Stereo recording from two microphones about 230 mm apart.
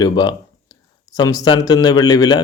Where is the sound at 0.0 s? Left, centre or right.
Centre.